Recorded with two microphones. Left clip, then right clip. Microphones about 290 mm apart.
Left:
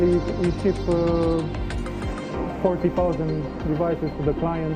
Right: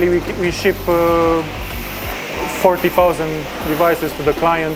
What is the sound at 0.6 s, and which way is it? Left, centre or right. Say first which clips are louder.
Speech: right 8 dB; centre.